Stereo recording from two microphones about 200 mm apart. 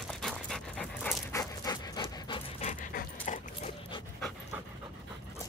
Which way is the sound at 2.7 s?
40° left (ahead or behind).